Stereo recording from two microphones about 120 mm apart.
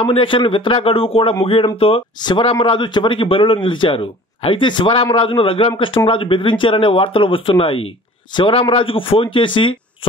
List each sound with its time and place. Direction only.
0.0 s a man's voice: 50° left (ahead or behind)
2.2 s a man's voice: 40° left (ahead or behind)